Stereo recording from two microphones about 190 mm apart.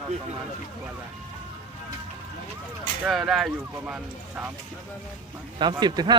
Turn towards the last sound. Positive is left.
turn(degrees=-20)  # may be behind; listen again after turning